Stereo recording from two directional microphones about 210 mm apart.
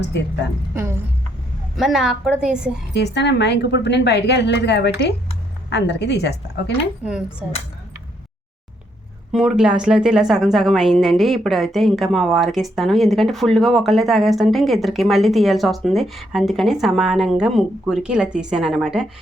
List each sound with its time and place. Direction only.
0.7 s speech: 15° right (ahead or behind)
1.7 s a woman's voice: centre (ahead or behind)
2.9 s a woman's voice: 55° left (ahead or behind)
7.0 s a woman's voice: 5° right (ahead or behind)
9.3 s a woman's voice: 5° right (ahead or behind)